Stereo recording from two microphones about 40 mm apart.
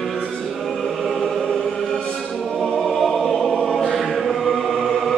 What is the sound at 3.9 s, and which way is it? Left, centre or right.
Choir, centre.